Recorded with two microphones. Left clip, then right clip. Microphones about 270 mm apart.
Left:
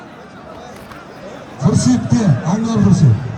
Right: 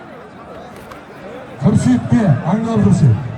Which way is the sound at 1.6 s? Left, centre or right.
Centre.